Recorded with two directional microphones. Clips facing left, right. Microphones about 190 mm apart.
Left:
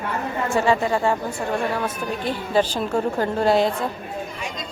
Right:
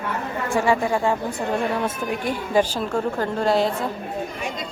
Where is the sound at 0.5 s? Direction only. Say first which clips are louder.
Even; 15° right (ahead or behind).